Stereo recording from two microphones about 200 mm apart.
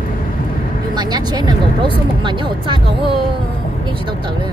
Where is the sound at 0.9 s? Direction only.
20° right (ahead or behind).